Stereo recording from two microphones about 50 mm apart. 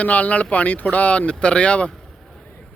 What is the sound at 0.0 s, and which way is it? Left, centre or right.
Speech, left.